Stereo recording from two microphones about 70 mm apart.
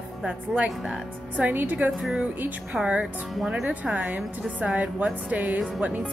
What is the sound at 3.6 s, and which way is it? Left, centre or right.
A woman's voice, centre.